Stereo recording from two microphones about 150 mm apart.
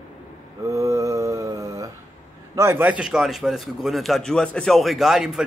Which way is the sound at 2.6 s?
15° right (ahead or behind).